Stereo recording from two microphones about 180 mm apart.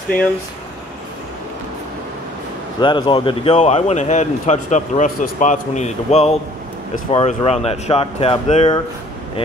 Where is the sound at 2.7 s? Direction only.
25° left (ahead or behind).